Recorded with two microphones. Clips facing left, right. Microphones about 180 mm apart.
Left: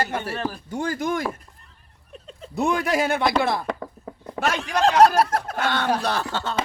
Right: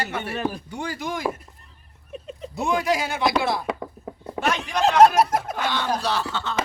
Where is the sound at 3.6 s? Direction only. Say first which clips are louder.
Right 1 dB; 10° right (ahead or behind).